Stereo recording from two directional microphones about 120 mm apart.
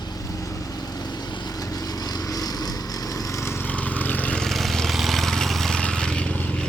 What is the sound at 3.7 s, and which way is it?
Vehicle, 10° left (ahead or behind).